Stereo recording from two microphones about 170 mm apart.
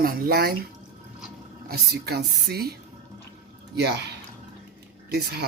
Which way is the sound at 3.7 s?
80° right.